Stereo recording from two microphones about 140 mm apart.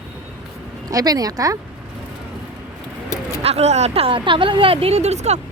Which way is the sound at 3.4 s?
45° right (ahead or behind).